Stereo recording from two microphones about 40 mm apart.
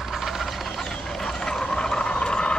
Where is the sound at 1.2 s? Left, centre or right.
Centre.